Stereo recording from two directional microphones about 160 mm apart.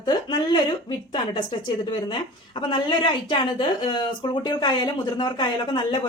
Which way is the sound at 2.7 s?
30° left (ahead or behind).